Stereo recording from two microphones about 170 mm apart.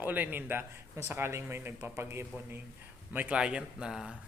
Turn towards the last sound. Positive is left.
turn(degrees=-5)  # may be behind; listen again after turning